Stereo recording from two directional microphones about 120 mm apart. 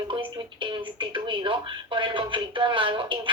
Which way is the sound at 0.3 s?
45° right (ahead or behind).